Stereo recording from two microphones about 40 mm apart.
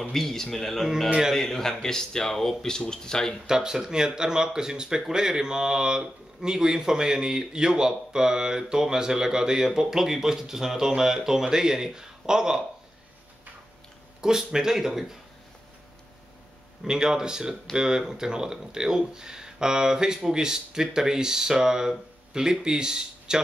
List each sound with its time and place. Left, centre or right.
0.1 s speech: centre
3.4 s speech: centre
14.2 s speech: centre
16.8 s speech: centre